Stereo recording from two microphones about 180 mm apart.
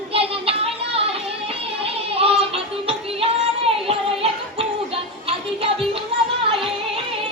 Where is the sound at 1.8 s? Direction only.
30° right (ahead or behind).